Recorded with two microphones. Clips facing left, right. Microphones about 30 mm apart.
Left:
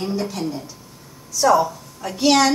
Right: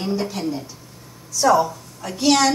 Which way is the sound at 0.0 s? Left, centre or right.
Centre.